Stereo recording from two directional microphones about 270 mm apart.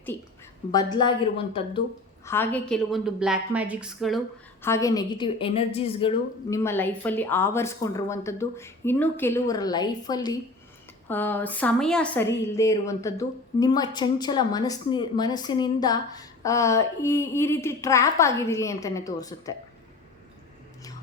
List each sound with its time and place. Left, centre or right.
0.7 s a woman's voice: centre
2.2 s a woman's voice: centre
4.6 s a woman's voice: centre